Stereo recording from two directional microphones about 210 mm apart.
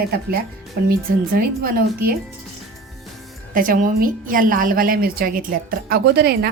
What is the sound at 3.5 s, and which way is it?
A woman's voice, 40° right (ahead or behind).